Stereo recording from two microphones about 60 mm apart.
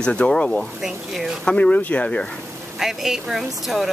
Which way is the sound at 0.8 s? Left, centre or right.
Centre.